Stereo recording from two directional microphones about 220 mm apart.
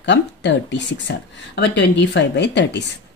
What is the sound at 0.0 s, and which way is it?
Speech, 55° left (ahead or behind).